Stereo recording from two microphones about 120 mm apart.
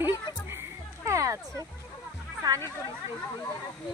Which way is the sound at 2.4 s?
35° right (ahead or behind).